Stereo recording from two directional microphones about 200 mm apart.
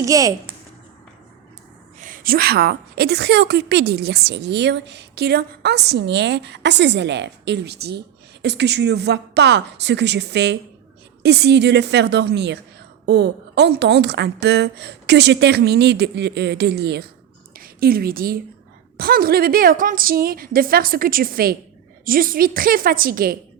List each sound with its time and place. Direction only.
0.0 s a woman's voice: 15° right (ahead or behind)
2.0 s a woman's voice: 40° right (ahead or behind)